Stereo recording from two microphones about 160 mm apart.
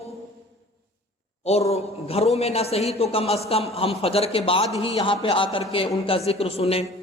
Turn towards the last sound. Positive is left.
turn(degrees=40)  # may be behind; listen again after turning